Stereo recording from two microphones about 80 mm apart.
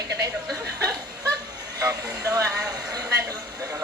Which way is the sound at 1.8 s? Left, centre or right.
Right.